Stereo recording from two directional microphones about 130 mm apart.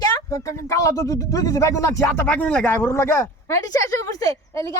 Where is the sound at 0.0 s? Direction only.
25° left (ahead or behind).